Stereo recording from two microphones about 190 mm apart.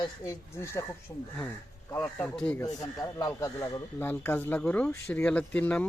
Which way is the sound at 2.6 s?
20° left (ahead or behind).